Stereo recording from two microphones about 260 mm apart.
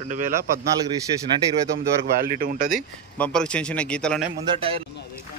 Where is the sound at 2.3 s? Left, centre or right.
Right.